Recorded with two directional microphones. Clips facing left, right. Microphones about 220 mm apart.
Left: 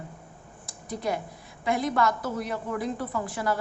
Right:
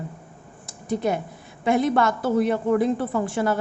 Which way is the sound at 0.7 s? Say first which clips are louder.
Right 6 dB; 25° right (ahead or behind).